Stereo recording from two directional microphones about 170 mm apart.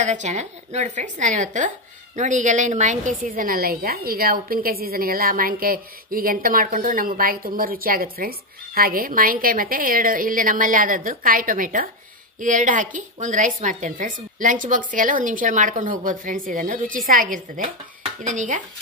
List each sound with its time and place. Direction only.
0.0 s a woman's voice: 45° right (ahead or behind)